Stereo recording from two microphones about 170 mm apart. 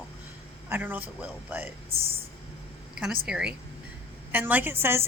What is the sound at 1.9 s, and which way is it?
Speech, 35° right (ahead or behind).